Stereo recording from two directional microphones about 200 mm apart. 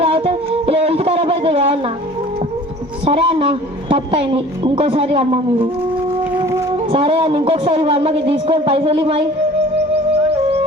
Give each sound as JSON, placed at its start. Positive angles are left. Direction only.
{"t": 0.0, "sound": "a sound", "side_deg": -30}
{"t": 3.0, "sound": "a woman's voice", "side_deg": -30}
{"t": 6.3, "sound": "music", "side_deg": -15}
{"t": 6.9, "sound": "a woman's voice", "side_deg": -30}